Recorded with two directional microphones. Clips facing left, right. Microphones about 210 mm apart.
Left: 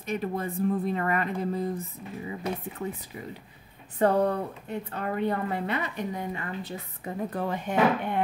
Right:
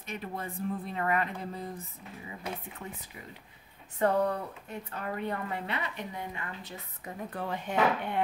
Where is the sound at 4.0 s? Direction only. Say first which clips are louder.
Left 4 dB; 35° left (ahead or behind); by 8.2 s 50° left (ahead or behind).